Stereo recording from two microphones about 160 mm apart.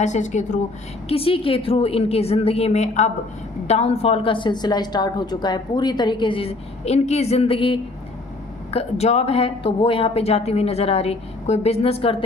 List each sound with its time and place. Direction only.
0.0 s a woman's voice: 50° left (ahead or behind)
1.0 s a woman's voice: 35° left (ahead or behind)